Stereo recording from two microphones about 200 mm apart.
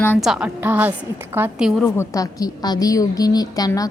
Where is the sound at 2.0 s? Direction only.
15° left (ahead or behind).